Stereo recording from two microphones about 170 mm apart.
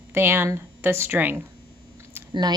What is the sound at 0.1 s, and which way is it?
Speech, 15° right (ahead or behind).